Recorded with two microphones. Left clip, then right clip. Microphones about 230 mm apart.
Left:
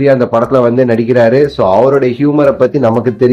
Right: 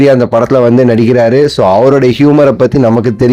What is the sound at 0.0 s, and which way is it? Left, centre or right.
Speech, right.